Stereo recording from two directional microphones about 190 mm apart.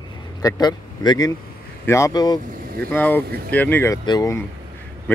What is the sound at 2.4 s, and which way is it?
Speech, 50° right (ahead or behind).